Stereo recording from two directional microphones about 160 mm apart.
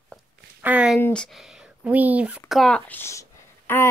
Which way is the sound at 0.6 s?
10° right (ahead or behind).